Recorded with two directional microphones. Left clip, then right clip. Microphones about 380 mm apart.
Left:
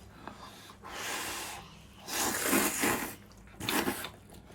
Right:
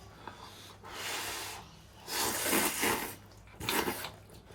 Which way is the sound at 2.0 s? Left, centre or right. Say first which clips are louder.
Left 1 dB; centre.